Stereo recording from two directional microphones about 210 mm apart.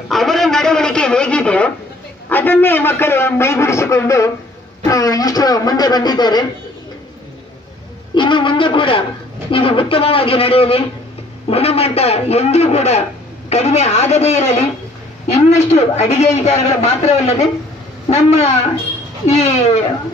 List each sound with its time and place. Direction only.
0.1 s a man's voice: centre (ahead or behind); by 6.4 s 20° left (ahead or behind)
8.1 s a man's voice: 25° left (ahead or behind)